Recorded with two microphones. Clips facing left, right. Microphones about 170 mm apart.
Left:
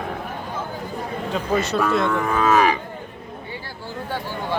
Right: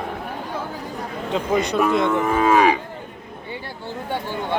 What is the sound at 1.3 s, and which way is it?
Cattle, 15° right (ahead or behind).